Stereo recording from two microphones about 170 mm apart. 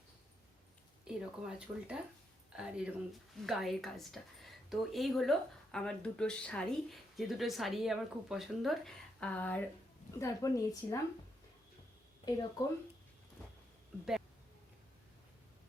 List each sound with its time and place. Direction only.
1.0 s a woman's voice: 5° right (ahead or behind); by 11.0 s 20° left (ahead or behind)
12.2 s a woman's voice: 25° left (ahead or behind)